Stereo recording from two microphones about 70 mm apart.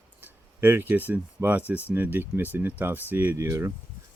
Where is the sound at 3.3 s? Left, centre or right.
Right.